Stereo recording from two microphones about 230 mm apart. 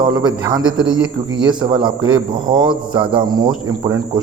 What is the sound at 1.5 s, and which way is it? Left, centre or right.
Speech, centre.